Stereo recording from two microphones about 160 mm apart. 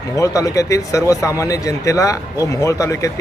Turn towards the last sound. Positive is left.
turn(degrees=20)  # may be behind; listen again after turning